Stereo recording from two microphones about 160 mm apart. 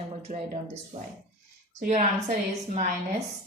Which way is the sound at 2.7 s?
45° right (ahead or behind).